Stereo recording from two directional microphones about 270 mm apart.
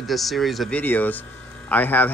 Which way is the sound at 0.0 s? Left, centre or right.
Centre.